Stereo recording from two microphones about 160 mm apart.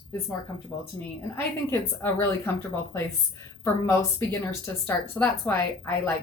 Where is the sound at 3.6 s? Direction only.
15° left (ahead or behind).